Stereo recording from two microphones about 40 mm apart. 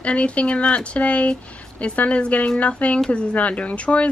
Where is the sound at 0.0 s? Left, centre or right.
Left.